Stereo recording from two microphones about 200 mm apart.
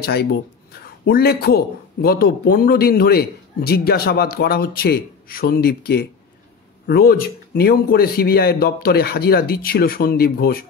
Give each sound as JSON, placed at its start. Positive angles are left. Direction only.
{"t": 0.0, "sound": "a man's voice", "side_deg": 55}